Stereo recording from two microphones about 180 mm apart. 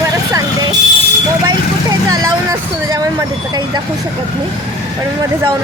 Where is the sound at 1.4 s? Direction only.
20° right (ahead or behind).